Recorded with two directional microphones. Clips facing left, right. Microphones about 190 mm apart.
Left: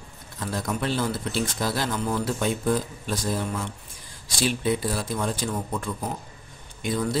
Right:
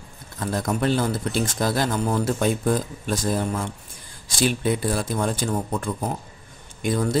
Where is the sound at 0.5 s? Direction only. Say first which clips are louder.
Right 5 dB; 50° right (ahead or behind).